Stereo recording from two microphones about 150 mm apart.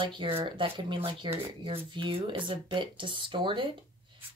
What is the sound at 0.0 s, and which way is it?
Speech, 35° right (ahead or behind).